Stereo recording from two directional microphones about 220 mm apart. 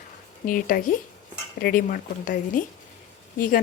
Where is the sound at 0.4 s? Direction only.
40° left (ahead or behind).